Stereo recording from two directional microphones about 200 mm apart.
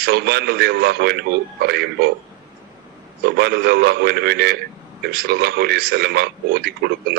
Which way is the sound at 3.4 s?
55° right (ahead or behind).